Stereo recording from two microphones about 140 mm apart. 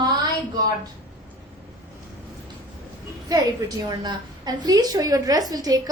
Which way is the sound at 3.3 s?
25° right (ahead or behind).